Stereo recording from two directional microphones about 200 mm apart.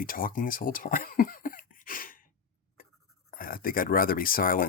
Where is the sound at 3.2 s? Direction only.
45° left (ahead or behind).